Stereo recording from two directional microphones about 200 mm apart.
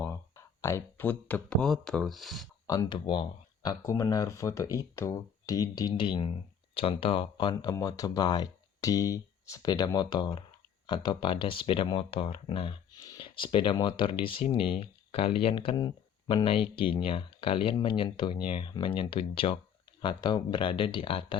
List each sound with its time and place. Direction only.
0.0 s speech: 10° left (ahead or behind)
2.6 s speech: 20° left (ahead or behind)